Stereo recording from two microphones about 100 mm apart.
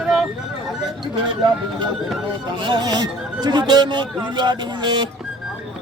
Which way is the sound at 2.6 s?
45° right (ahead or behind).